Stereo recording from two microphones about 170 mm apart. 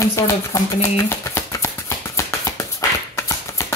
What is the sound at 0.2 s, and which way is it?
Speech, 15° left (ahead or behind).